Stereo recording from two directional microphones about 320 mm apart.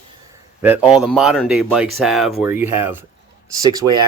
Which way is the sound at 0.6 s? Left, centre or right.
Centre.